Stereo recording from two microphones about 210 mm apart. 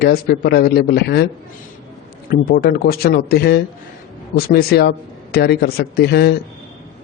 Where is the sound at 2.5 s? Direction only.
45° left (ahead or behind).